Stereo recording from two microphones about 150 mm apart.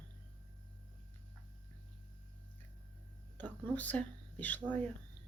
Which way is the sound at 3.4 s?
10° left (ahead or behind).